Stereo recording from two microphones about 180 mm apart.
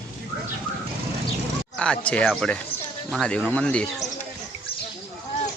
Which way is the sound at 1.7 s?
5° left (ahead or behind).